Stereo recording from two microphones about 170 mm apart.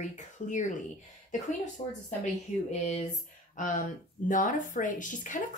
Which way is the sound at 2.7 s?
40° left (ahead or behind).